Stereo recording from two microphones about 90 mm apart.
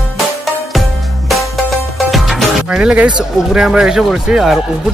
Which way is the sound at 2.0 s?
Centre (ahead or behind).